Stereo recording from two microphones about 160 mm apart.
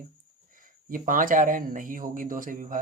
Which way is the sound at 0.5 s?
60° right (ahead or behind).